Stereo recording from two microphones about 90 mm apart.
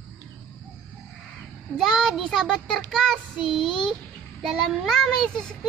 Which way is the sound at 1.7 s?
5° left (ahead or behind).